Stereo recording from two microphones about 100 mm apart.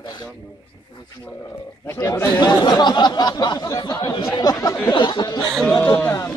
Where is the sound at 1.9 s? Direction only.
30° left (ahead or behind).